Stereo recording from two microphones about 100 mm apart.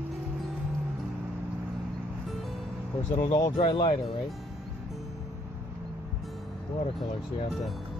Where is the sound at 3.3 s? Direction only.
45° left (ahead or behind).